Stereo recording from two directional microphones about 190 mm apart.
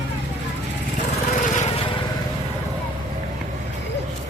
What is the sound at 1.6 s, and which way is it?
Lawn mower, 30° left (ahead or behind).